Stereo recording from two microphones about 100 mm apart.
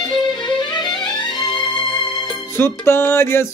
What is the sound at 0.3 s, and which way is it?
Music, 50° left (ahead or behind).